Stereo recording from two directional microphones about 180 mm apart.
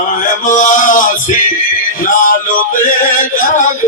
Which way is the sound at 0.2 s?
45° left (ahead or behind).